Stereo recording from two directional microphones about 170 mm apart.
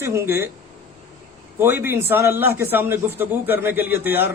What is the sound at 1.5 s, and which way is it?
A man's voice, 15° right (ahead or behind).